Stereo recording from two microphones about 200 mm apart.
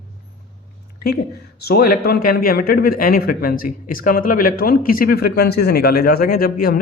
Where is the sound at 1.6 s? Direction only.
50° left (ahead or behind).